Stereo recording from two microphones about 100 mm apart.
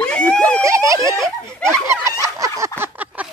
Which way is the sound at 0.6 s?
30° right (ahead or behind).